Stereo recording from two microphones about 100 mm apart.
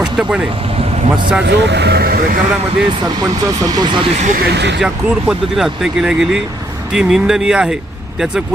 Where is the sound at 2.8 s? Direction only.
40° right (ahead or behind).